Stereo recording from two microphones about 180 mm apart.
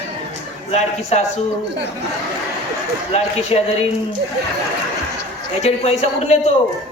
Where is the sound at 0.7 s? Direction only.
40° left (ahead or behind).